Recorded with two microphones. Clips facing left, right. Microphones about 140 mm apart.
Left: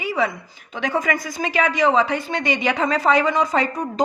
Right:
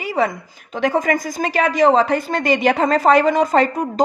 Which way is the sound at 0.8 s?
45° right (ahead or behind).